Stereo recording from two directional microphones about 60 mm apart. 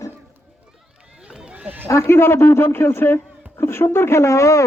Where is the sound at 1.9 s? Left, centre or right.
Left.